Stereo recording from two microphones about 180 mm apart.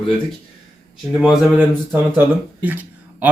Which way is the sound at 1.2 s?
5° right (ahead or behind).